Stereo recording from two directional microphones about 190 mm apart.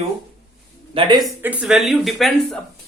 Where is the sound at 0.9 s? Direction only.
25° right (ahead or behind).